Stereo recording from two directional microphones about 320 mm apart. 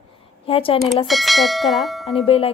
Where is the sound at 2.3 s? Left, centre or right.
Centre.